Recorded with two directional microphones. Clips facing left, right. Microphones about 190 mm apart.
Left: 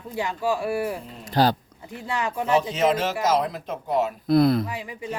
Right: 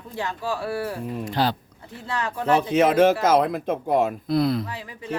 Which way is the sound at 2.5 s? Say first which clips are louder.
Right 3 dB; 55° right (ahead or behind).